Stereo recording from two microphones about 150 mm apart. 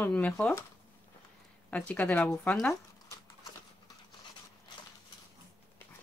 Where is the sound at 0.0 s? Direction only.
10° left (ahead or behind).